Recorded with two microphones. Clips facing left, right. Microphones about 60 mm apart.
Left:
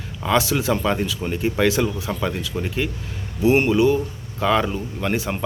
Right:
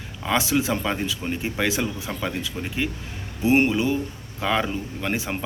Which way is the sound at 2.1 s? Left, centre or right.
Centre.